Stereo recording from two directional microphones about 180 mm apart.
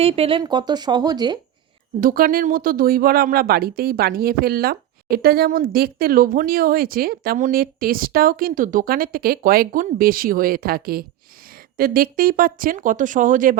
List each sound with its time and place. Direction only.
0.0 s speech: 35° right (ahead or behind)
2.0 s speech: 50° right (ahead or behind)